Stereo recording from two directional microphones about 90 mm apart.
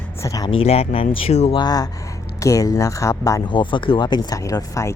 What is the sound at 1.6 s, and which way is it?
Speech, 45° left (ahead or behind).